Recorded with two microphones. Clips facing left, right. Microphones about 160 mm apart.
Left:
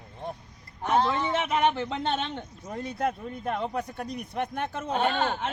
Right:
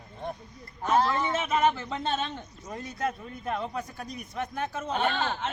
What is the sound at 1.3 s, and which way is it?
Speech, 65° left (ahead or behind).